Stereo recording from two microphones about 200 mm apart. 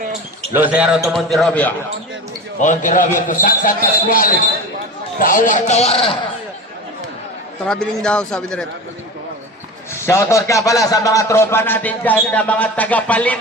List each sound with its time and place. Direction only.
0.5 s a man's voice: 5° right (ahead or behind)
2.6 s a man's voice: 40° left (ahead or behind)
7.6 s a man's voice: 5° left (ahead or behind)
9.9 s a man's voice: 15° left (ahead or behind)